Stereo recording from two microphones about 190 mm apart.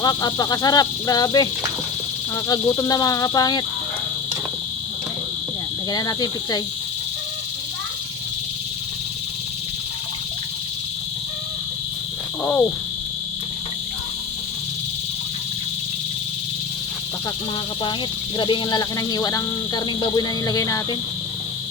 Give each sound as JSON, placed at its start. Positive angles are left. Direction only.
{"t": 0.0, "sound": "speech", "side_deg": 20}
{"t": 5.9, "sound": "speech", "side_deg": 20}
{"t": 12.4, "sound": "speech", "side_deg": 10}
{"t": 18.3, "sound": "speech", "side_deg": 25}